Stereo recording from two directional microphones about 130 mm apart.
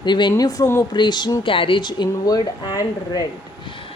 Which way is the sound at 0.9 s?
35° left (ahead or behind).